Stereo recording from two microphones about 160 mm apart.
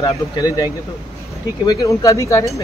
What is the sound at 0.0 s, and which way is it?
Speech, 25° left (ahead or behind).